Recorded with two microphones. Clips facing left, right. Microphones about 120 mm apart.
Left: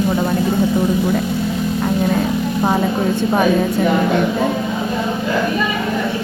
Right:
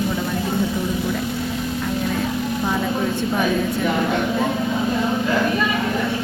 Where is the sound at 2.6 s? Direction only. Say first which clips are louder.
Left 6 dB; 35° left (ahead or behind).